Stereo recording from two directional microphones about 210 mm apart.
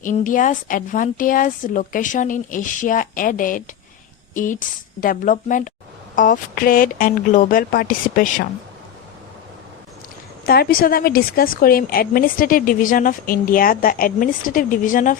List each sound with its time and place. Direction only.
0.0 s speech: 40° left (ahead or behind)
4.9 s speech: 40° left (ahead or behind)
10.4 s a woman's voice: 45° left (ahead or behind)